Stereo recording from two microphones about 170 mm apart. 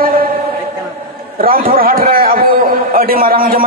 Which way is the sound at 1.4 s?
60° right (ahead or behind).